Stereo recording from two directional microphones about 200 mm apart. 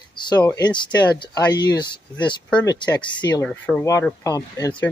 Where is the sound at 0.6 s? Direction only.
20° left (ahead or behind).